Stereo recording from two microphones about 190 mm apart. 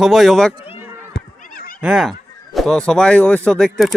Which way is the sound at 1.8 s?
5° right (ahead or behind).